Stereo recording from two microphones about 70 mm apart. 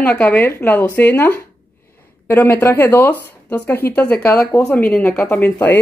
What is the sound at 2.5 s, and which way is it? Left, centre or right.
Speech, left.